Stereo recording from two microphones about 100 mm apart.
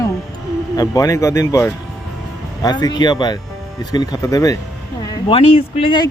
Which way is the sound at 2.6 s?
45° left (ahead or behind).